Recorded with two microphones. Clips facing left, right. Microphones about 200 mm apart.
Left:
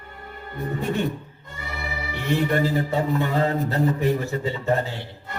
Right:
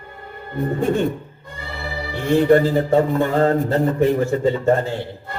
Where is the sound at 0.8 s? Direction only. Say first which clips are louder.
Right 6 dB; 50° right (ahead or behind).